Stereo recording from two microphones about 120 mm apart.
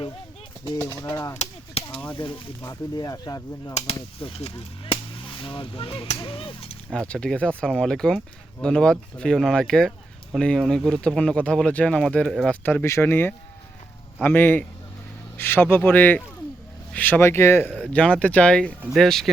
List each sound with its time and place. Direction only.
0.8 s cap gun: 25° left (ahead or behind)
1.4 s cap gun: 55° left (ahead or behind)
2.1 s cap gun: 45° left (ahead or behind)
2.6 s cap gun: 30° left (ahead or behind)
4.2 s cap gun: 55° left (ahead or behind)
6.9 s speech: 10° left (ahead or behind)
12.6 s speech: 20° left (ahead or behind); by 19.3 s centre (ahead or behind)